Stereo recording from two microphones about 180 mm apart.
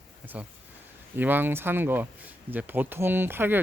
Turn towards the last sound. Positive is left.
turn(degrees=-10)  # may be behind; listen again after turning